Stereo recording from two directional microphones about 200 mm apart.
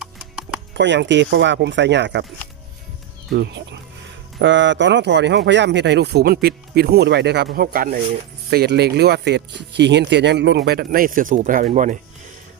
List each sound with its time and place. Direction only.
0.7 s speech: 60° right (ahead or behind)
3.3 s speech: 60° right (ahead or behind)
7.5 s speech: 45° right (ahead or behind)